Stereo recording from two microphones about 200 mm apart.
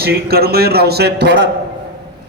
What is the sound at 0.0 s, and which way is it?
A man's voice, 50° right (ahead or behind).